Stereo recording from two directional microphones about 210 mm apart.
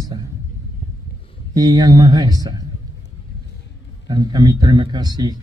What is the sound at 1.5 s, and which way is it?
Speech, 20° right (ahead or behind).